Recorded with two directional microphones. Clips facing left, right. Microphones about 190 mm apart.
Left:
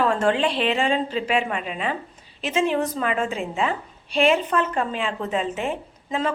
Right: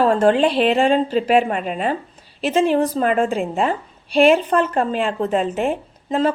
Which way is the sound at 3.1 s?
50° right (ahead or behind).